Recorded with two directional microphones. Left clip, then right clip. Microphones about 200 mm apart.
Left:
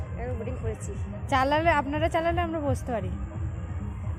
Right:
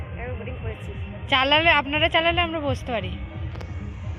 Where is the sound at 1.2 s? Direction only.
10° left (ahead or behind).